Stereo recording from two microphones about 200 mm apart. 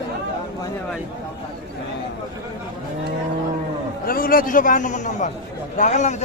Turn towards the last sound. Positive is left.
turn(degrees=35)  # may be behind; listen again after turning